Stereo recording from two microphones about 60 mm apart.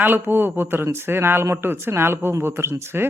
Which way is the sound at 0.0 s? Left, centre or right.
Right.